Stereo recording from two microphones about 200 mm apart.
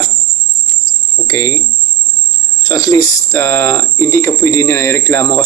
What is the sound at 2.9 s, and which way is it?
Speech, 10° left (ahead or behind).